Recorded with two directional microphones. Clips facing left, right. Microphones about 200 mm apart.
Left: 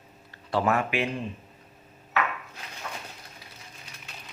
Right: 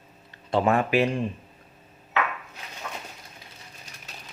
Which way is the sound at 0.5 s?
25° right (ahead or behind).